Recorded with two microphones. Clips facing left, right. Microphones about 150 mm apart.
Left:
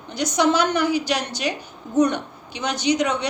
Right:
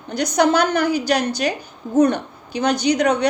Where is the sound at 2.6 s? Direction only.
50° right (ahead or behind).